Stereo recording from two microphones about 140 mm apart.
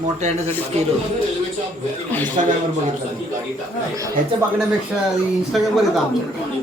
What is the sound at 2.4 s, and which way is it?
Speech, 60° right (ahead or behind).